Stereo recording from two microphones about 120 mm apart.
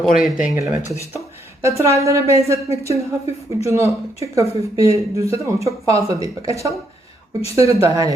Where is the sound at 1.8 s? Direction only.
25° right (ahead or behind).